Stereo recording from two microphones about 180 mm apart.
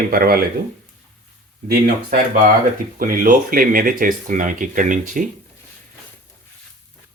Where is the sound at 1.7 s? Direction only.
55° right (ahead or behind).